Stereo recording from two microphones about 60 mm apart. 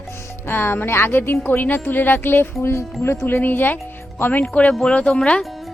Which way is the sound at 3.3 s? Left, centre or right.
Left.